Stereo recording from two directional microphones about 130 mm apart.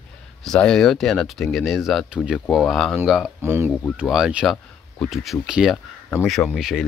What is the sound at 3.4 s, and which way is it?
Speech, 20° right (ahead or behind).